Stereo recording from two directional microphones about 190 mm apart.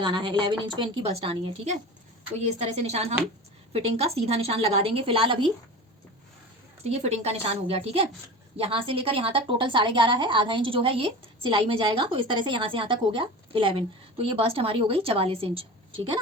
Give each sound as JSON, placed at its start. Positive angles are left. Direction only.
{"t": 0.0, "sound": "a woman's voice", "side_deg": -25}
{"t": 6.8, "sound": "a woman's voice", "side_deg": -35}